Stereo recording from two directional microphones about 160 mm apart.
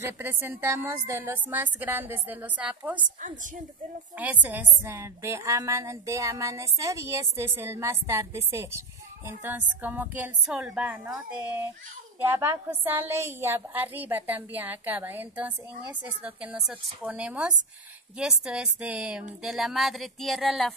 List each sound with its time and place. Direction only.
0.2 s a woman's voice: 15° right (ahead or behind)
3.2 s a woman's voice: 55° right (ahead or behind)
4.2 s a woman's voice: 10° right (ahead or behind)